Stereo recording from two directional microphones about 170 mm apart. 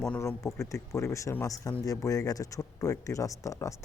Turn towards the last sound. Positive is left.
turn(degrees=20)  # may be behind; listen again after turning